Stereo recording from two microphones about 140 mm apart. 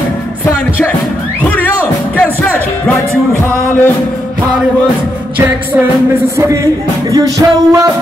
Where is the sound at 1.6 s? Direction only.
15° left (ahead or behind).